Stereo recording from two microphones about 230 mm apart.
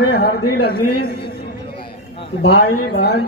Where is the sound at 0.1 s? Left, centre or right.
Left.